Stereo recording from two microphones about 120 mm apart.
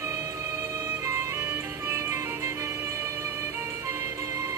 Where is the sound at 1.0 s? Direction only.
20° right (ahead or behind).